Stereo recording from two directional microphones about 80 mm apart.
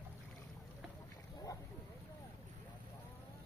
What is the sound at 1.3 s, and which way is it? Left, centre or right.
Boat, left.